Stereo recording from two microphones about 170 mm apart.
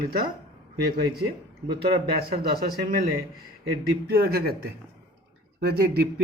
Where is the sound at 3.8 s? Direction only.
65° right (ahead or behind).